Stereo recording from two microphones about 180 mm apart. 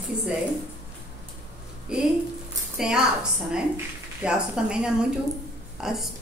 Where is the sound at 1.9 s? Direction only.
5° right (ahead or behind).